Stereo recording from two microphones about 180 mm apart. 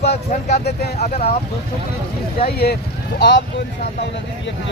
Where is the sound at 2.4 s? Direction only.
60° left (ahead or behind).